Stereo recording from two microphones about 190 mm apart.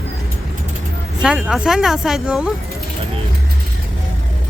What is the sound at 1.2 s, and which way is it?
Speech, 5° right (ahead or behind).